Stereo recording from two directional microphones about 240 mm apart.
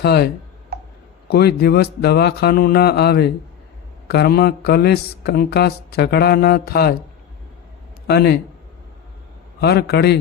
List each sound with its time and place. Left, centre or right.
0.0 s a man's voice: left
1.3 s mantra: left
8.0 s a man's voice: left
9.6 s a man's voice: left